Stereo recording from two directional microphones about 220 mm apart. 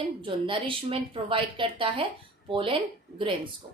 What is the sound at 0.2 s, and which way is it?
A woman's voice, 25° right (ahead or behind).